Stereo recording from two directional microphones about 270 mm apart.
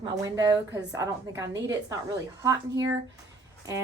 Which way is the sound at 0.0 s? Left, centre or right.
Centre.